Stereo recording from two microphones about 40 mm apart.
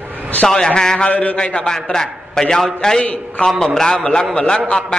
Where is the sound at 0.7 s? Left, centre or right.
Centre.